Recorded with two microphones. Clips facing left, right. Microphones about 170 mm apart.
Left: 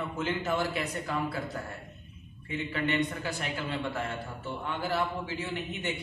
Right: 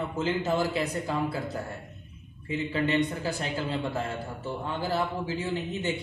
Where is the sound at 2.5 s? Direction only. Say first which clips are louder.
Right 4 dB; 30° right (ahead or behind).